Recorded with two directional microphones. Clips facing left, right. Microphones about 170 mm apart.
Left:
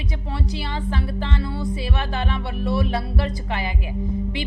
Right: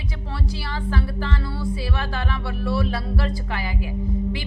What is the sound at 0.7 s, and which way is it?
A woman's voice, 20° left (ahead or behind).